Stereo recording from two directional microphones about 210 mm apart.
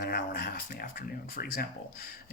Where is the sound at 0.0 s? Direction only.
40° left (ahead or behind).